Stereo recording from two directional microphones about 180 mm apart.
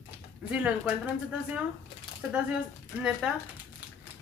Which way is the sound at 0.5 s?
5° right (ahead or behind).